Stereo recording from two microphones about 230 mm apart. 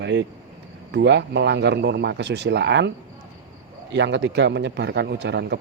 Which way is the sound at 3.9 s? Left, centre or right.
Right.